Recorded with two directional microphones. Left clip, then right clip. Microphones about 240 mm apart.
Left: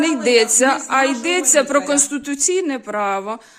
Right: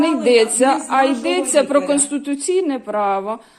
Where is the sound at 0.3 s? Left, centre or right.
Left.